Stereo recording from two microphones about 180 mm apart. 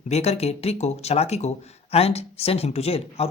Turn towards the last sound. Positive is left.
turn(degrees=35)  # may be behind; listen again after turning